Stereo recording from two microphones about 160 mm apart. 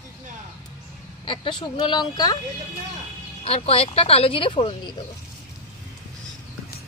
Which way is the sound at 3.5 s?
35° left (ahead or behind).